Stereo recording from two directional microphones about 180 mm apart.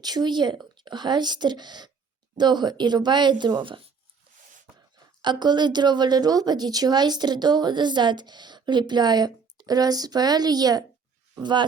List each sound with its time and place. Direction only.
0.0 s a woman's voice: 25° right (ahead or behind)
5.2 s a woman's voice: 25° right (ahead or behind)